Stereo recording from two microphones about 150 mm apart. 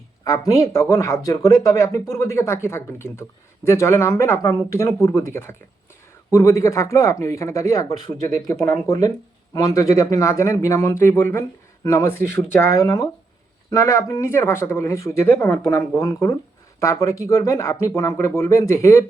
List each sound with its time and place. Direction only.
0.3 s speech: 20° left (ahead or behind)
8.5 s speech: 10° left (ahead or behind)
8.9 s speech: 25° left (ahead or behind)